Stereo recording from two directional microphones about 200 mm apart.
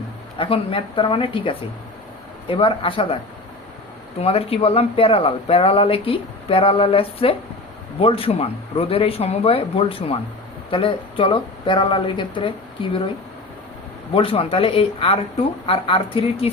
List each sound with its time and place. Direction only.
0.3 s speech: 25° left (ahead or behind)
4.2 s speech: 30° left (ahead or behind)
14.1 s speech: 25° left (ahead or behind)